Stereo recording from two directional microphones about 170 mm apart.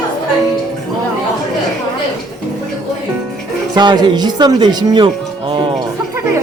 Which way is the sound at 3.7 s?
25° right (ahead or behind).